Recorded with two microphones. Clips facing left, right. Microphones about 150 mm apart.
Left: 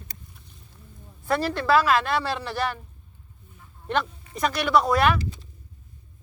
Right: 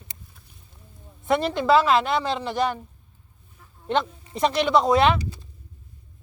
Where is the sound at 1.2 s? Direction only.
20° right (ahead or behind).